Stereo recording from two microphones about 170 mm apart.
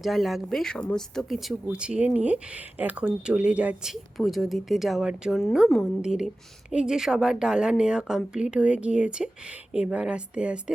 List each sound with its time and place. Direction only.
0.0 s speech: centre (ahead or behind)